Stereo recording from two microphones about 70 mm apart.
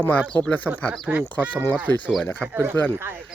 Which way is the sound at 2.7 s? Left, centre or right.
Left.